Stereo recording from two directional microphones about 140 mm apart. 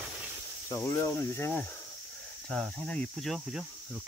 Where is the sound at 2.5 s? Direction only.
5° left (ahead or behind).